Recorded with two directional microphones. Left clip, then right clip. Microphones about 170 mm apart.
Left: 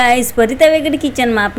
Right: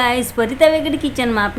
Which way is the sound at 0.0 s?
15° left (ahead or behind).